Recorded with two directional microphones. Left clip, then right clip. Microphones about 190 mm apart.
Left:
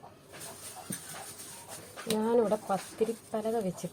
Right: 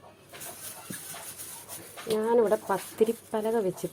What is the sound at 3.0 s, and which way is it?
Speech, 45° right (ahead or behind).